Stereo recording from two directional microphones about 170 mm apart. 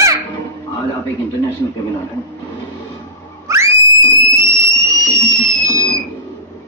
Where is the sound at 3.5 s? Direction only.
15° right (ahead or behind).